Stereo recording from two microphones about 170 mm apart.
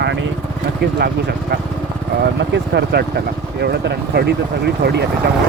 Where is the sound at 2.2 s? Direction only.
85° right.